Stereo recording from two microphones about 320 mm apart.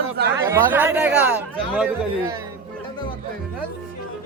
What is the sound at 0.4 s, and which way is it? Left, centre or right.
Speech, centre.